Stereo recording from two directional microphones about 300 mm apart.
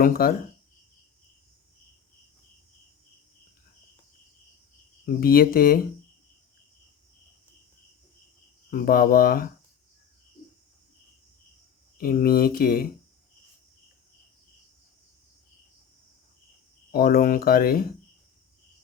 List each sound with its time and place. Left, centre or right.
0.0 s speech: left
5.0 s speech: left
8.7 s speech: left
11.9 s speech: left
16.9 s speech: left